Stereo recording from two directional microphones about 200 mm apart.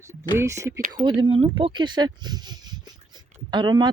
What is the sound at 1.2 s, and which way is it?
Speech, 25° right (ahead or behind).